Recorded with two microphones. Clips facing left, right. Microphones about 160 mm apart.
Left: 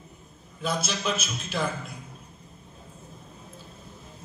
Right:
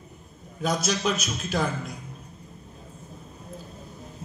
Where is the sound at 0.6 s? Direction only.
40° right (ahead or behind).